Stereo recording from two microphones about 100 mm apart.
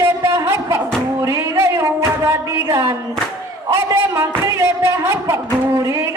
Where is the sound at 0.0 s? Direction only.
30° right (ahead or behind).